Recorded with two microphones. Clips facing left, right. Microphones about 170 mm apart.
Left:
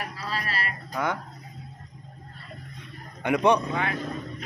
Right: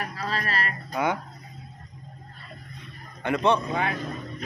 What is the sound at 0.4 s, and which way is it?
Speech, 45° right (ahead or behind).